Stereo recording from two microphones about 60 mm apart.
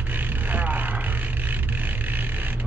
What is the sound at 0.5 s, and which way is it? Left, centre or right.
Vehicle, right.